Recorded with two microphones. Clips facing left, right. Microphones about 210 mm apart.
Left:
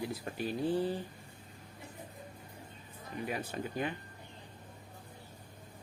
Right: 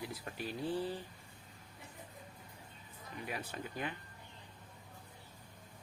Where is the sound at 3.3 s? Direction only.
40° left (ahead or behind).